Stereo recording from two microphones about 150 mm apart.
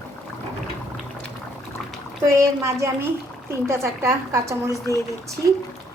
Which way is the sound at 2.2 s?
20° right (ahead or behind).